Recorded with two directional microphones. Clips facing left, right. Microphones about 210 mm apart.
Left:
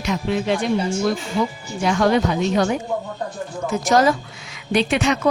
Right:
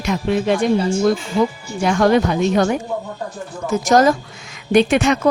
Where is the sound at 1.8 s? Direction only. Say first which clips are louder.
Right 3 dB; 50° right (ahead or behind).